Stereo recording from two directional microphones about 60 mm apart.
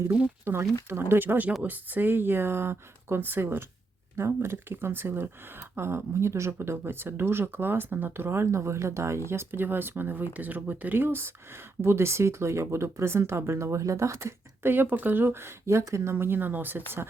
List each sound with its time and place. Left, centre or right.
0.6 s speech: right